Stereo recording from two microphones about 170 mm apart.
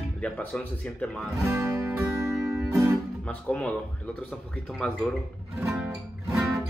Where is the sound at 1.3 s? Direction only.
15° right (ahead or behind).